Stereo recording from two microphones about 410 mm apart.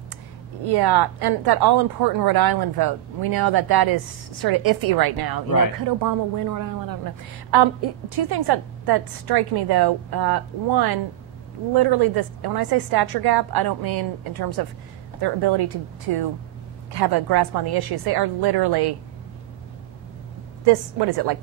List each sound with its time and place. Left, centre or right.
0.7 s a woman's voice: right
5.9 s a woman's voice: right
8.3 s a woman's voice: right
16.1 s a woman's voice: right
16.9 s a woman's voice: right
21.0 s speech: right